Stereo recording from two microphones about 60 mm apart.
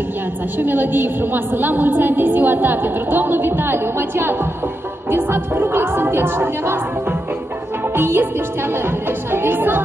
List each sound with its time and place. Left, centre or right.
0.6 s a woman's voice: right
5.1 s music: right
9.3 s a woman's voice: right